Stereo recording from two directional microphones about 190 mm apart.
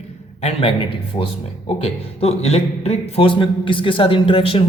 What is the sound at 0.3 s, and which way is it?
Speech, 30° left (ahead or behind).